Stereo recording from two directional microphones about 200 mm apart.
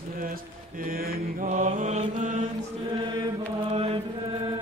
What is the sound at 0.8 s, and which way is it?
Mantra, 45° right (ahead or behind).